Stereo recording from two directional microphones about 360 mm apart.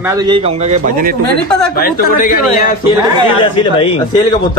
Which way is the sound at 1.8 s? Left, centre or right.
Left.